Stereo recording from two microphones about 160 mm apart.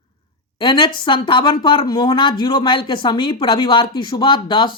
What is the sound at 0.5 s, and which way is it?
A woman's voice, 30° left (ahead or behind).